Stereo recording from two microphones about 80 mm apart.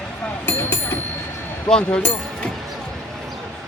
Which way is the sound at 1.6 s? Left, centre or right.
Centre.